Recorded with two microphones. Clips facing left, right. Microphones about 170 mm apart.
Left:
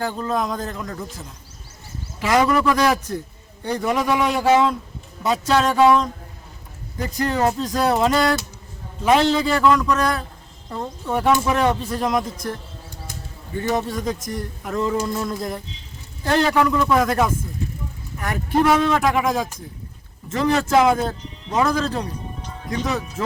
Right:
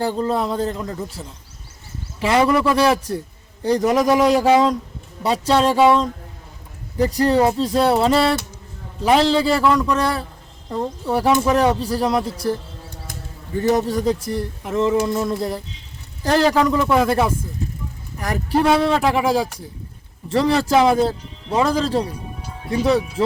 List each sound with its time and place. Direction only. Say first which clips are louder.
0.0 s speech: right 3 dB; 30° right (ahead or behind)
13.6 s speech: right 5 dB; 40° right (ahead or behind)
22.0 s speech: right 1 dB; 10° right (ahead or behind)
23.2 s speech: right 4 dB; 35° right (ahead or behind)